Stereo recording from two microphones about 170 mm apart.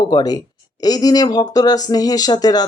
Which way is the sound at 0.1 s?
25° left (ahead or behind).